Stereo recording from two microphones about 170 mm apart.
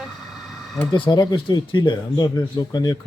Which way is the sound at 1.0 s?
25° left (ahead or behind).